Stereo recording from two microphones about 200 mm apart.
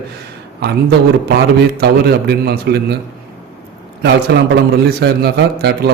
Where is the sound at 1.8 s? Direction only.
55° right (ahead or behind).